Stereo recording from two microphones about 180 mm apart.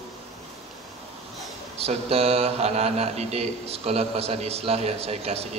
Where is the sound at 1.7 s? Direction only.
35° right (ahead or behind).